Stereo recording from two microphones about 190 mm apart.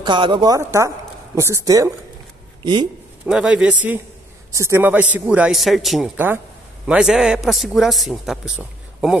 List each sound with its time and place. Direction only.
0.0 s a woman's voice: 25° right (ahead or behind)
3.3 s a man's voice: 5° right (ahead or behind)